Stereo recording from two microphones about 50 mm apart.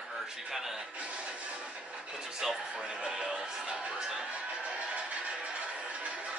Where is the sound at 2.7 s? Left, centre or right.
Centre.